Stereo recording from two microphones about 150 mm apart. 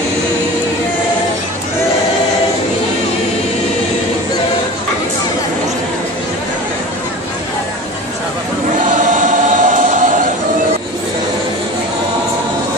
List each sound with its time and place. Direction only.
8.8 s choir: 55° right (ahead or behind)